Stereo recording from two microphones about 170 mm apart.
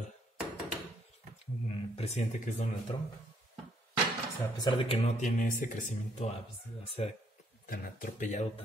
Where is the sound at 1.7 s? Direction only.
40° left (ahead or behind).